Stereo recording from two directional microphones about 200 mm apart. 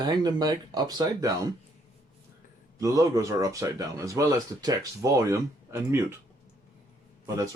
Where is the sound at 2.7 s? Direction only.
15° right (ahead or behind).